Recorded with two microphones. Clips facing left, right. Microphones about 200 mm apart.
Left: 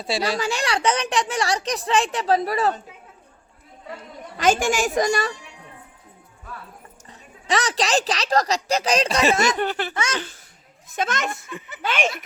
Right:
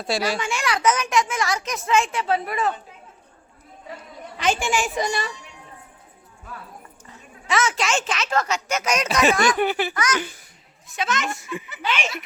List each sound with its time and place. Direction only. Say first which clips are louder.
0.2 s a child's voice: left 1 dB; 35° left (ahead or behind)
4.4 s a woman's voice: left 3 dB; 45° left (ahead or behind)
7.1 s speech: left 1 dB; 35° left (ahead or behind)
9.6 s speech: right 3 dB; 10° right (ahead or behind)
9.9 s speech: right 2 dB; 25° left (ahead or behind)
10.2 s speech: right 3 dB; 15° right (ahead or behind)
10.9 s a woman's voice: left 1 dB; 50° left (ahead or behind)